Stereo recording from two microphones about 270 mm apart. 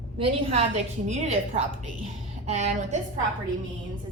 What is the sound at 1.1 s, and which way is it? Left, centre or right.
A woman's voice, right.